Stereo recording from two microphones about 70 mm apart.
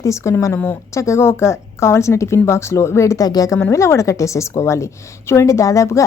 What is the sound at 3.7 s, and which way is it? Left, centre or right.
A woman's voice, left.